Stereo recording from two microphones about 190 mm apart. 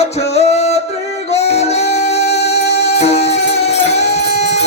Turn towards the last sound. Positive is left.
turn(degrees=35)  # may be behind; listen again after turning